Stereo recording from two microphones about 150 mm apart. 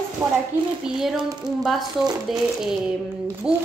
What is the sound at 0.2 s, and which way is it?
Speech, 20° right (ahead or behind).